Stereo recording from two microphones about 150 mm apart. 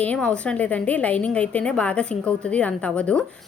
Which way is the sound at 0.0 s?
10° left (ahead or behind).